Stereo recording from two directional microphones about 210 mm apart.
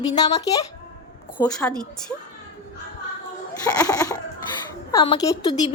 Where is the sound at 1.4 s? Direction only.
5° left (ahead or behind).